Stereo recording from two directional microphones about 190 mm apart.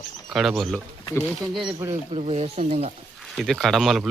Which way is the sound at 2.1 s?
35° right (ahead or behind).